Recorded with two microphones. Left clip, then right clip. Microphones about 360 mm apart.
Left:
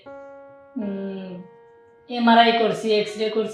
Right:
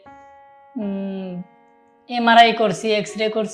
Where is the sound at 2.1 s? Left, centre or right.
Right.